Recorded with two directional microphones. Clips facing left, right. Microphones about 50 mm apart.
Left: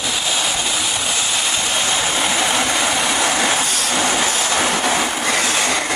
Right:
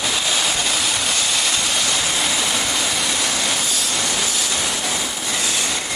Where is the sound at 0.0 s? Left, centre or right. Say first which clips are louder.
Even; centre.